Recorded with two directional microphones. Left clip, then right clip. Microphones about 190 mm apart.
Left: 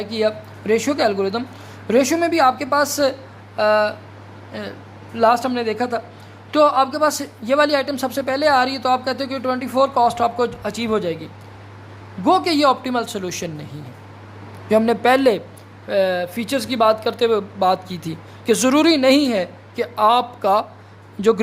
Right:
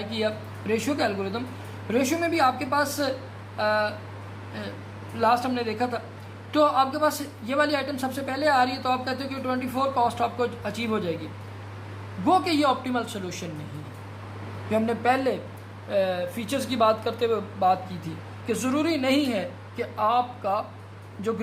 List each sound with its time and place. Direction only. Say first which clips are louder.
0.0 s a man's voice: left 7 dB; 45° left (ahead or behind)
12.2 s a man's voice: left 6 dB; 45° left (ahead or behind)
14.7 s a man's voice: left 8 dB; 50° left (ahead or behind)